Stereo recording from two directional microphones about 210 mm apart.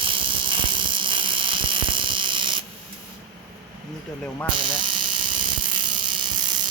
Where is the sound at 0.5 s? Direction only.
25° right (ahead or behind).